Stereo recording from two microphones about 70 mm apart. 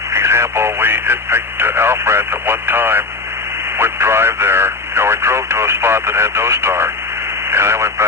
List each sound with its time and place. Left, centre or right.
0.1 s speech: right